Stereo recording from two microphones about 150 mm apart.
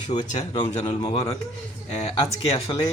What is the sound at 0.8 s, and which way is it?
Speech, 40° left (ahead or behind).